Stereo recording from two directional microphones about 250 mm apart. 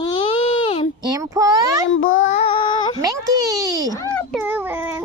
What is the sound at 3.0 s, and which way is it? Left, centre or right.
Speech, centre.